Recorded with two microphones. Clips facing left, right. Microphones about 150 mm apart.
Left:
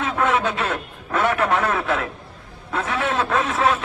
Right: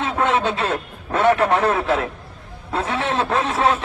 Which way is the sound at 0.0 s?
30° right (ahead or behind).